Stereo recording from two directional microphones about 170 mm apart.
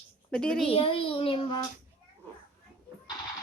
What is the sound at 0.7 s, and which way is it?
Speech, 35° left (ahead or behind).